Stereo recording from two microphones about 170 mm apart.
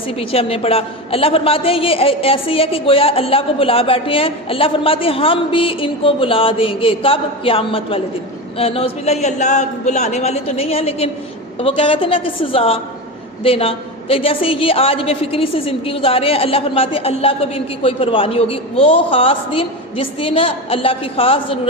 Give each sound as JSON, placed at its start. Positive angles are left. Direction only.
{"t": 0.2, "sound": "a woman's voice", "side_deg": 35}